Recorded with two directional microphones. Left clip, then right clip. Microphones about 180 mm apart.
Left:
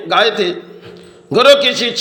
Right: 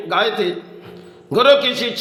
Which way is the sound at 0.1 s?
15° left (ahead or behind).